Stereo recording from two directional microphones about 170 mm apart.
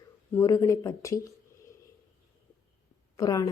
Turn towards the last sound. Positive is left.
turn(degrees=20)  # may be behind; listen again after turning